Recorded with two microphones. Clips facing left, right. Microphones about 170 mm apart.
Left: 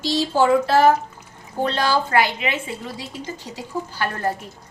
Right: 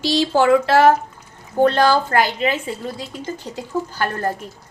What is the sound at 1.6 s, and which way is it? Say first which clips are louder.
Speech: right 6 dB; 50° right (ahead or behind).